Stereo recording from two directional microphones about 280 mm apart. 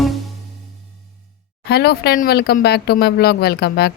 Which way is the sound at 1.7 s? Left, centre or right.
Left.